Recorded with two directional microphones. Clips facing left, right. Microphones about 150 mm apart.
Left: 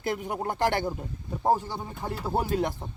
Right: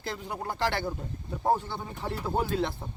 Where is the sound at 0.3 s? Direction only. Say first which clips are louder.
Left 2 dB; 50° left (ahead or behind).